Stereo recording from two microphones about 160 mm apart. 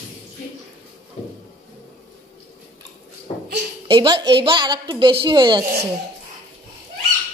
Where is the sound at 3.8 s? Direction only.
30° right (ahead or behind).